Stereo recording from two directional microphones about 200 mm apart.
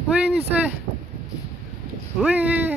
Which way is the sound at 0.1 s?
5° right (ahead or behind).